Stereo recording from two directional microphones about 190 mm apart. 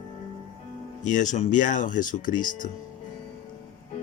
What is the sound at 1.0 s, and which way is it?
Speech, 40° left (ahead or behind).